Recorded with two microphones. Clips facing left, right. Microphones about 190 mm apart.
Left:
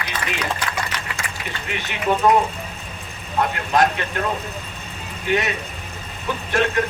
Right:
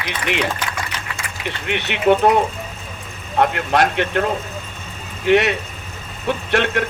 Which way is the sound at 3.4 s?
70° right (ahead or behind).